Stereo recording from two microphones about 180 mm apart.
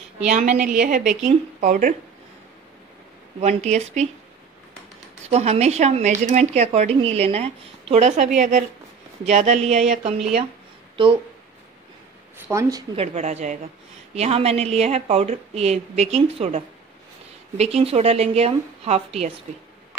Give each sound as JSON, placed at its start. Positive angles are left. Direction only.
{"t": 0.3, "sound": "speech", "side_deg": -45}
{"t": 0.6, "sound": "a woman's voice", "side_deg": -5}
{"t": 1.2, "sound": "speech", "side_deg": -45}
{"t": 3.3, "sound": "a woman's voice", "side_deg": -40}
{"t": 5.2, "sound": "a woman's voice", "side_deg": -35}
{"t": 12.4, "sound": "a woman's voice", "side_deg": -15}
{"t": 12.9, "sound": "a woman's voice", "side_deg": -35}